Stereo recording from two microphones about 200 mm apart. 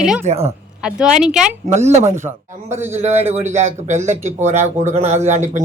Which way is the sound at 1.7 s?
35° right (ahead or behind).